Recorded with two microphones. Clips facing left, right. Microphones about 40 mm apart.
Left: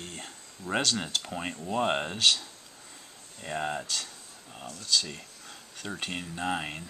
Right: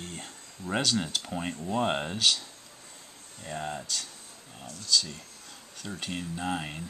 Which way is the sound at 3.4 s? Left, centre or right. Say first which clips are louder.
Left 3 dB; left.